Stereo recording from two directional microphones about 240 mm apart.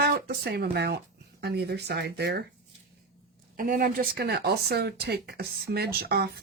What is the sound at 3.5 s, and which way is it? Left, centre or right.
Speech, right.